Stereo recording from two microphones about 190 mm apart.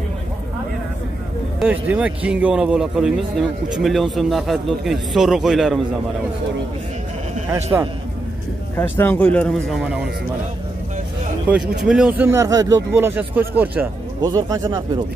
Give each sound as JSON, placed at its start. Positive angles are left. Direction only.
{"t": 1.6, "sound": "a man's voice", "side_deg": -5}
{"t": 8.7, "sound": "speech", "side_deg": 10}
{"t": 11.8, "sound": "a man's voice", "side_deg": -5}
{"t": 12.3, "sound": "speech", "side_deg": -15}
{"t": 14.2, "sound": "speech", "side_deg": -20}